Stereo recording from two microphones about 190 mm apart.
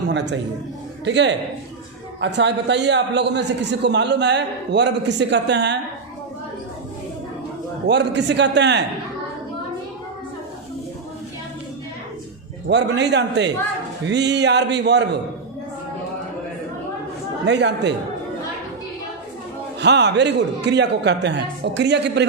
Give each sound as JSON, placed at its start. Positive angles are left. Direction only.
{"t": 1.0, "sound": "a man's voice", "side_deg": -65}
{"t": 7.9, "sound": "a man's voice", "side_deg": -65}
{"t": 12.6, "sound": "a man's voice", "side_deg": -65}
{"t": 17.4, "sound": "a man's voice", "side_deg": -65}
{"t": 19.8, "sound": "a man's voice", "side_deg": -65}